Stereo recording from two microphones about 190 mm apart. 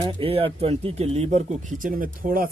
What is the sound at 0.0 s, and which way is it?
Speech, 30° right (ahead or behind).